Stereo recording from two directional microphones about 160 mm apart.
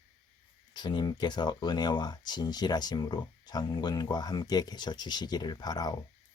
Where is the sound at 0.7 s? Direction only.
30° left (ahead or behind).